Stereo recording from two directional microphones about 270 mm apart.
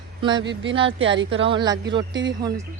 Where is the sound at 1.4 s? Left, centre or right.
Centre.